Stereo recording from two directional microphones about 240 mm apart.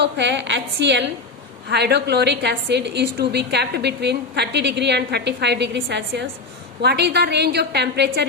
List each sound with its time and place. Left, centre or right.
0.0 s a woman's voice: right